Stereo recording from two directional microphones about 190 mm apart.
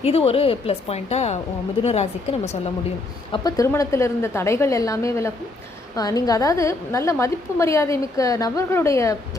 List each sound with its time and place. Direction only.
0.0 s a woman's voice: 30° left (ahead or behind)
3.3 s a woman's voice: 20° left (ahead or behind)